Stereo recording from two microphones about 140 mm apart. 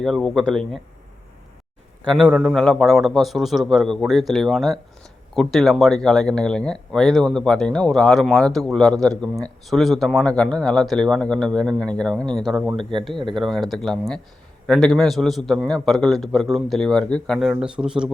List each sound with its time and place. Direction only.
0.0 s speech: centre (ahead or behind)
2.2 s speech: 5° right (ahead or behind)
12.7 s speech: 35° right (ahead or behind)
13.4 s speech: centre (ahead or behind)